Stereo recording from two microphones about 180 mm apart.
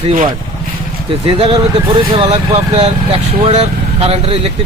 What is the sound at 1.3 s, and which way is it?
Speech, 30° right (ahead or behind).